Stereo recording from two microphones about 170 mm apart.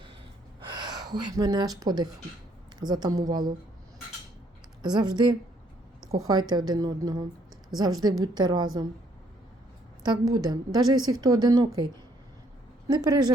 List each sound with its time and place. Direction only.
0.7 s a woman's voice: 25° right (ahead or behind)
4.8 s a woman's voice: 25° right (ahead or behind)
10.0 s a woman's voice: 25° right (ahead or behind)
12.9 s a woman's voice: 25° right (ahead or behind)